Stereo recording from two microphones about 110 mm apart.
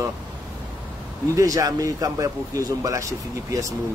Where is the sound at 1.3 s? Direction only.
30° right (ahead or behind).